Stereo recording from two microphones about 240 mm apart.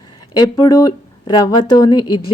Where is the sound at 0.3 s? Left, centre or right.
Centre.